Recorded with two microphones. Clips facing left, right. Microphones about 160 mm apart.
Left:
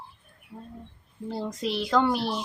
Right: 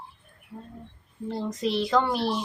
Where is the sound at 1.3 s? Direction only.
Centre (ahead or behind).